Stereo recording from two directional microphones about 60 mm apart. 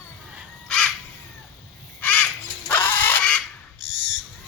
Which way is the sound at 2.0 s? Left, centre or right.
Left.